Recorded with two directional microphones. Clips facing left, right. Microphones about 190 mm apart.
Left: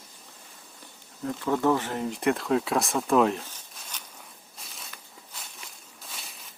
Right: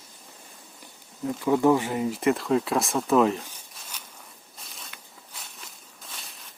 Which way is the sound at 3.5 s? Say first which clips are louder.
Even; 10° right (ahead or behind).